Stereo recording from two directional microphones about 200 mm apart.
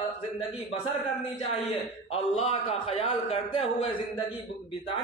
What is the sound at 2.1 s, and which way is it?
A man's voice, 30° left (ahead or behind).